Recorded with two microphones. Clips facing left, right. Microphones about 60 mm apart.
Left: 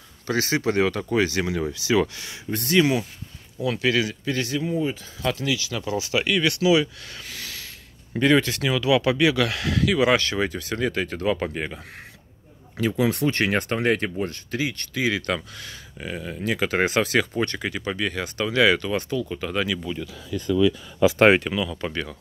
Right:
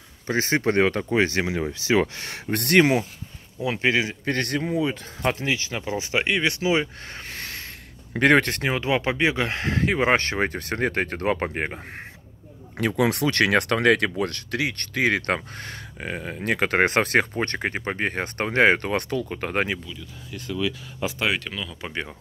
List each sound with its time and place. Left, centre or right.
0.3 s speech: right
2.2 s speech: right
2.8 s speech: right
3.6 s speech: right
4.2 s speech: right
5.2 s speech: right
8.2 s speech: right
12.7 s speech: right
21.4 s speech: centre